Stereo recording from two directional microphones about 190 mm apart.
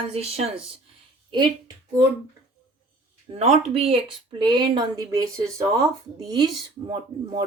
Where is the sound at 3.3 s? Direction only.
35° right (ahead or behind); by 5.8 s 15° right (ahead or behind).